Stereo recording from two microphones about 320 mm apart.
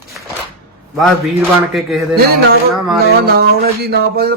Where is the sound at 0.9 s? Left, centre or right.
Centre.